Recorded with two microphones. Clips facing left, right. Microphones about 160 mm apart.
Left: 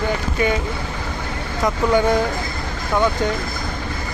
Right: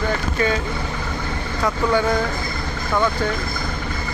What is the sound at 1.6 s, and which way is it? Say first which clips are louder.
Speech: left 2 dB; 15° left (ahead or behind).